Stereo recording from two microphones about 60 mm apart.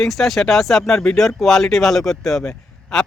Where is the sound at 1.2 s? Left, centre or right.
Centre.